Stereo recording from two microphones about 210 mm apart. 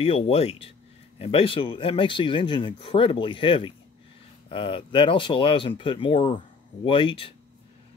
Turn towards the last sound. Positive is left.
turn(degrees=25)  # may be behind; listen again after turning